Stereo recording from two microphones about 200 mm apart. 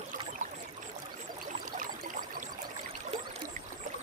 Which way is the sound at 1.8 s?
40° right (ahead or behind).